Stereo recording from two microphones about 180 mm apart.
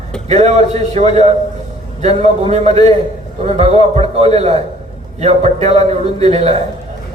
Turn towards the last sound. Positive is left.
turn(degrees=-35)  # may be behind; listen again after turning